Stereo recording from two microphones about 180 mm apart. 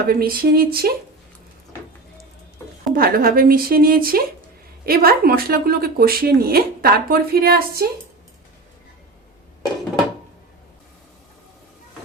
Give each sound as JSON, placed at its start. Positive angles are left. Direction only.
{"t": 0.0, "sound": "speech", "side_deg": -55}
{"t": 2.9, "sound": "speech", "side_deg": -55}